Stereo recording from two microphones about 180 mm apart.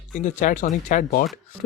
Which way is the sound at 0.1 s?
45° left (ahead or behind).